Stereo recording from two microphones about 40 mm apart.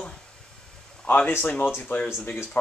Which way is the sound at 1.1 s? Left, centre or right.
Left.